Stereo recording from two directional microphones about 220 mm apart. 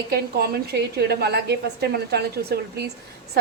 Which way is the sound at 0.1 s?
45° right (ahead or behind).